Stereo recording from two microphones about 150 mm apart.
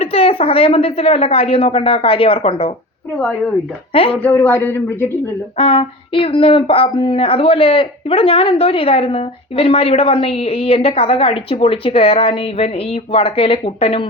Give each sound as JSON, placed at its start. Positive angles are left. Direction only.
{"t": 0.0, "sound": "speech", "side_deg": 40}
{"t": 3.2, "sound": "speech", "side_deg": 5}
{"t": 5.5, "sound": "speech", "side_deg": 40}